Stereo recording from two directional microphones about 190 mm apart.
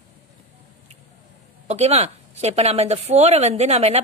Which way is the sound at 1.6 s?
35° right (ahead or behind).